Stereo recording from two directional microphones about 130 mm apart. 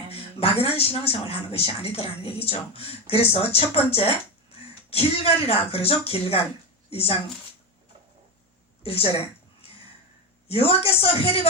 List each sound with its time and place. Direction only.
0.1 s a woman's voice: 50° left (ahead or behind)
8.8 s a woman's voice: 50° left (ahead or behind)
10.5 s a woman's voice: 45° left (ahead or behind)